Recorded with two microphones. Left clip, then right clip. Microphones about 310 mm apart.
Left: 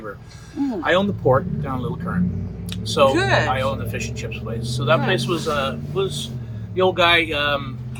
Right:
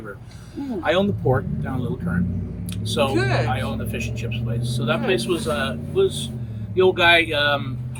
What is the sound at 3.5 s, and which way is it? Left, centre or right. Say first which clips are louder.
Speech: left 4 dB; centre.